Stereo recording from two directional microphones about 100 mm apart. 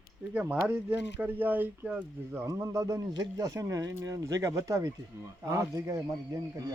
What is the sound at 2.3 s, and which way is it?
A man's voice, 30° right (ahead or behind).